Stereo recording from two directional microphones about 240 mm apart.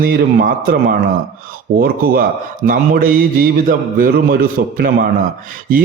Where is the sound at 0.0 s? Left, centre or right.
Right.